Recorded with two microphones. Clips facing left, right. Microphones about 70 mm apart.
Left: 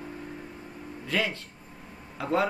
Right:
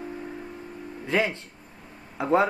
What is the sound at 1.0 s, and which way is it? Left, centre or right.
Speech, right.